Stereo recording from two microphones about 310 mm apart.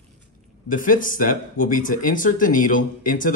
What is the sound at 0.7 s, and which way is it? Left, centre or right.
Speech, left.